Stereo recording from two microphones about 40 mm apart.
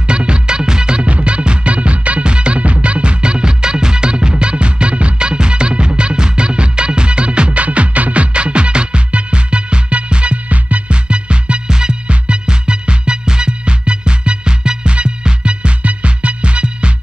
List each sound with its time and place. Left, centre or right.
0.0 s music: right